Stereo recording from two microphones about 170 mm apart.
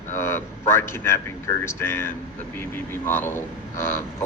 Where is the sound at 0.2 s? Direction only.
15° left (ahead or behind).